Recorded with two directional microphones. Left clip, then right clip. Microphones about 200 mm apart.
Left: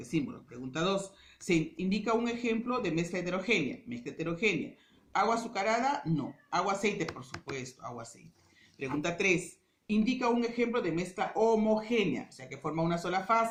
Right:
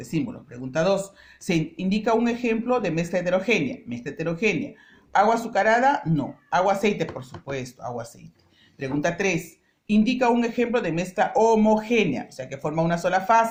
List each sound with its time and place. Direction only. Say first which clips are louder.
0.0 s speech: right 6 dB; 50° right (ahead or behind)